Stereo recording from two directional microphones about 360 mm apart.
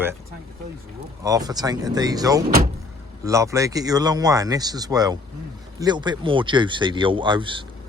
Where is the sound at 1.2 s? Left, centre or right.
Centre.